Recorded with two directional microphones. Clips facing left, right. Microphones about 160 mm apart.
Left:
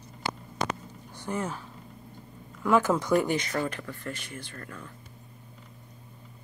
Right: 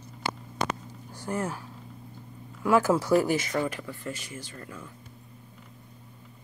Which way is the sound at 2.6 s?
10° right (ahead or behind).